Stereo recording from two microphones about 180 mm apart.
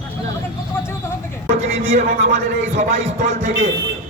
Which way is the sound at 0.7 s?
15° left (ahead or behind).